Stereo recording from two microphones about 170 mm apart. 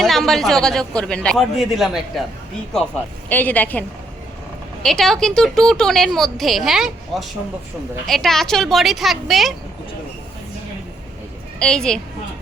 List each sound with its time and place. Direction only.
0.0 s a woman's voice: centre (ahead or behind)
3.2 s a woman's voice: 10° left (ahead or behind)
11.6 s a woman's voice: 5° left (ahead or behind)